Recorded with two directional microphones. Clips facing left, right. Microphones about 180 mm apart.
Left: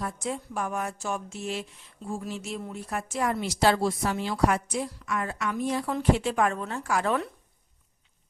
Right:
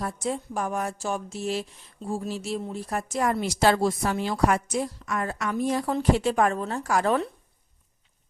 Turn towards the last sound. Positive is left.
turn(degrees=-35)  # may be behind; listen again after turning